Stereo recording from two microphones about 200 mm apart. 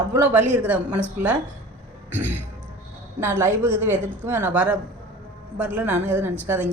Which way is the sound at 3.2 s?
10° right (ahead or behind).